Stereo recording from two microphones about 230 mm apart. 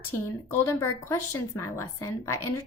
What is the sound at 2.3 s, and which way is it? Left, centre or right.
Speech, left.